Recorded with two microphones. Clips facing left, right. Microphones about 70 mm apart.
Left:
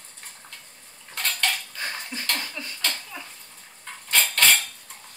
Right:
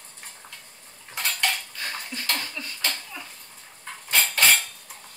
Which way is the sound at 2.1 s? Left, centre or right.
Left.